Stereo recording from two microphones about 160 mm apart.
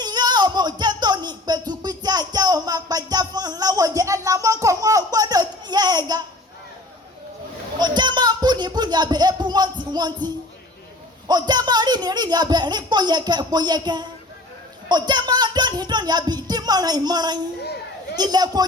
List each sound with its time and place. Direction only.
0.0 s a sound: 25° right (ahead or behind)
7.8 s a sound: 30° right (ahead or behind)
11.3 s speech: 25° right (ahead or behind)
14.8 s music: 25° right (ahead or behind)
17.6 s children playing: 90° left
18.2 s a woman's voice: 25° right (ahead or behind)